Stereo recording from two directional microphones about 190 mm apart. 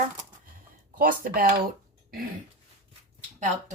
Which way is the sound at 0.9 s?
50° right (ahead or behind).